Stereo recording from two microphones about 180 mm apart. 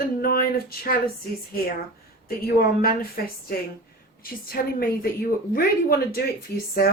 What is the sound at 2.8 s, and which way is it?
A woman's voice, 55° left (ahead or behind).